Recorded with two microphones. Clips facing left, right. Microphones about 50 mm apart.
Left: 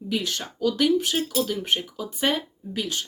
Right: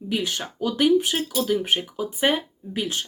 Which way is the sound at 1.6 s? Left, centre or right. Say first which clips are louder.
Right 2 dB; centre.